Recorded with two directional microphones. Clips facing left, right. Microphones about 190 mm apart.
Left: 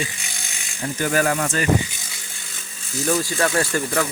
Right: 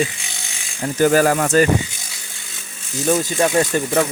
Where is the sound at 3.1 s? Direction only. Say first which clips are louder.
Right 4 dB; 20° right (ahead or behind).